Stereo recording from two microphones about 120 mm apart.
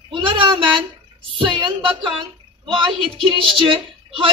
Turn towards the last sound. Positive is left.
turn(degrees=-45)  # may be behind; listen again after turning